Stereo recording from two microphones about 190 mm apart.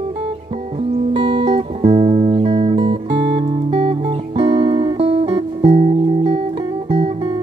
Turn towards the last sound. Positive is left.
turn(degrees=-30)  # may be behind; listen again after turning